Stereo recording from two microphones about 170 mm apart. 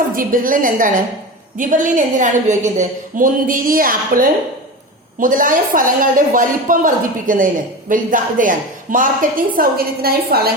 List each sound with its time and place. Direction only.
0.2 s speech: 55° right (ahead or behind)